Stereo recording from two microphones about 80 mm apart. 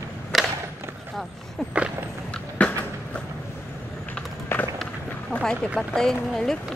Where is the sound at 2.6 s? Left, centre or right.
Centre.